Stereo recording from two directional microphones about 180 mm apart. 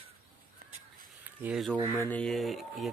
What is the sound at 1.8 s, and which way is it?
Speech, 20° right (ahead or behind).